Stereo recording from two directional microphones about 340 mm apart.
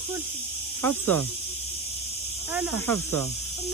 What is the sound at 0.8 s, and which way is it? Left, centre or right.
Speech, centre.